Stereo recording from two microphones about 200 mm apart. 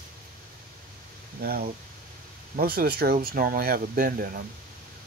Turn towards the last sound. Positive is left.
turn(degrees=-50)  # may be behind; listen again after turning